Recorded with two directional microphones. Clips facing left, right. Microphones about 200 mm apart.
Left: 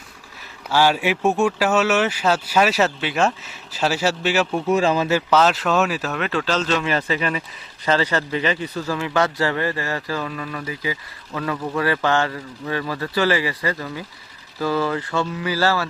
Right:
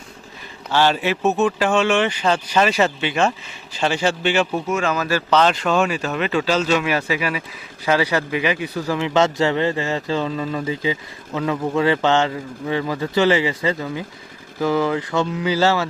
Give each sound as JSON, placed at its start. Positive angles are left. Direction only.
{"t": 0.7, "sound": "speech", "side_deg": 10}
{"t": 4.7, "sound": "speech", "side_deg": 30}
{"t": 5.3, "sound": "a man's voice", "side_deg": 5}